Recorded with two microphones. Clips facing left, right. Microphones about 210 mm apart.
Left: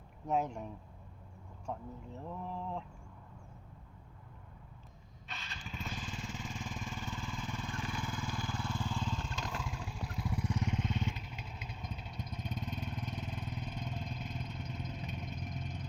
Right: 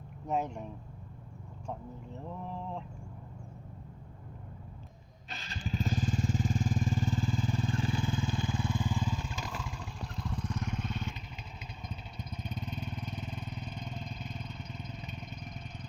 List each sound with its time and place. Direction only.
0.3 s mantra: centre (ahead or behind)
2.2 s mantra: centre (ahead or behind)
5.3 s vehicle: 35° right (ahead or behind); by 11.1 s 20° left (ahead or behind)
11.1 s vehicle: 5° left (ahead or behind)